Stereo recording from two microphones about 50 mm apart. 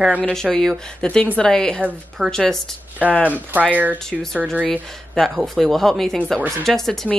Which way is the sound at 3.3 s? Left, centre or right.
Right.